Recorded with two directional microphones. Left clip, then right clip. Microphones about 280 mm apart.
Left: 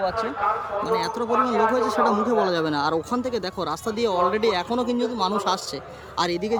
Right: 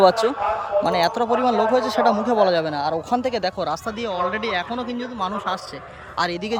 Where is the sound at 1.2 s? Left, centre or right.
Centre.